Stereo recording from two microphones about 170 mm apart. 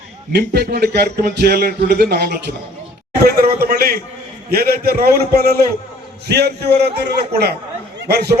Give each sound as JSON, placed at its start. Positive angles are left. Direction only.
{"t": 0.3, "sound": "a man's voice", "side_deg": -70}